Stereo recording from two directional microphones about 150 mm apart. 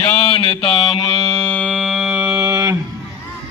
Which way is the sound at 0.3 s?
35° left (ahead or behind).